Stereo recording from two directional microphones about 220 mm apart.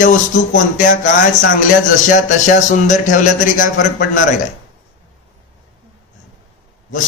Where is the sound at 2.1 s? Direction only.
35° left (ahead or behind).